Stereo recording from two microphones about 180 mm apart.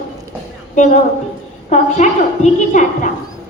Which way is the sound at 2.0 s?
40° left (ahead or behind).